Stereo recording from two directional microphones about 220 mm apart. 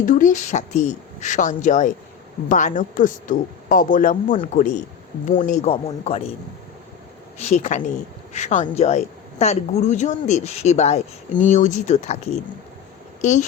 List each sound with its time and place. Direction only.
0.0 s speech: 35° left (ahead or behind)
7.3 s speech: 30° left (ahead or behind)
13.2 s speech: 35° left (ahead or behind)